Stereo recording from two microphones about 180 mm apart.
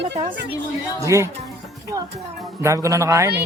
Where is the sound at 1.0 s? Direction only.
15° right (ahead or behind).